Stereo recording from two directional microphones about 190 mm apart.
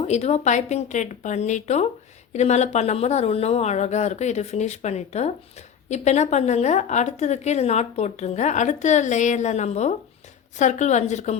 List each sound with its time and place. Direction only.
0.0 s speech: 35° left (ahead or behind)